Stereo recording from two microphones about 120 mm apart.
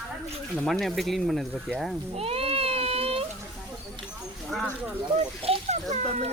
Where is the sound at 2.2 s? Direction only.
55° right (ahead or behind).